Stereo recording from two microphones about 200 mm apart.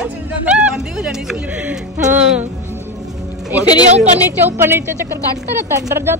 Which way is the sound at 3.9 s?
35° right (ahead or behind).